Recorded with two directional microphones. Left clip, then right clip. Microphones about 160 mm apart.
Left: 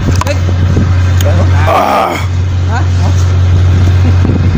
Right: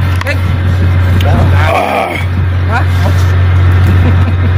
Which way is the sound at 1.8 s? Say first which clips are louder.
Left 4 dB; 35° left (ahead or behind).